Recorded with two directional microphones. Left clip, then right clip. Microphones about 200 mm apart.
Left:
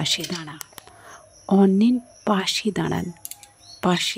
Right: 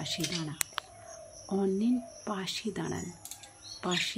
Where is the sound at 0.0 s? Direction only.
55° left (ahead or behind).